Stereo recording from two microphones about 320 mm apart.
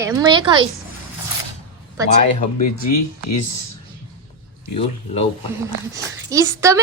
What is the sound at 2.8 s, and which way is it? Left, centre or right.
Speech, left.